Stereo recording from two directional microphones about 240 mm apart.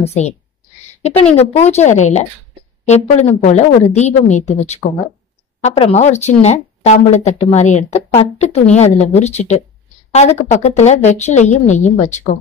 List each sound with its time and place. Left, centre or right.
0.0 s a woman's voice: left